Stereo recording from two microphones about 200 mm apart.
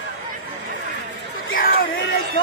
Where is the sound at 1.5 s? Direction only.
45° left (ahead or behind).